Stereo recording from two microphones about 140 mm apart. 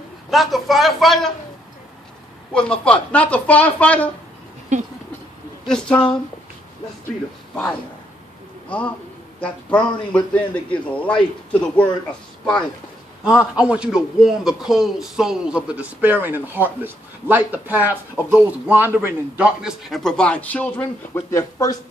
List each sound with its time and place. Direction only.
0.3 s a man's voice: centre (ahead or behind)
2.5 s a man's voice: 5° left (ahead or behind)
4.7 s a sound: 60° right (ahead or behind)
5.7 s a man's voice: 5° left (ahead or behind)
8.6 s a man's voice: 10° left (ahead or behind)
13.6 s a man's voice: 5° right (ahead or behind)
19.9 s a man's voice: 5° left (ahead or behind); by 21.7 s 20° left (ahead or behind)